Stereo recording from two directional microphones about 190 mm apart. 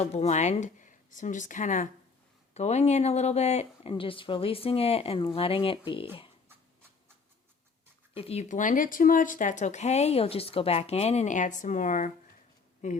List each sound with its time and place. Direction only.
0.0 s speech: 35° left (ahead or behind)
8.1 s speech: 30° left (ahead or behind)